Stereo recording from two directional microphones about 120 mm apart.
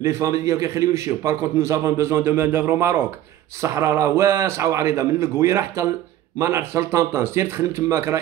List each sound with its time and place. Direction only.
0.0 s a man's voice: 25° right (ahead or behind)